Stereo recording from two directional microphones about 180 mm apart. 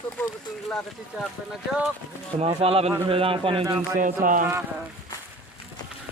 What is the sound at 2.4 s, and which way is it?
A man's voice, 35° right (ahead or behind).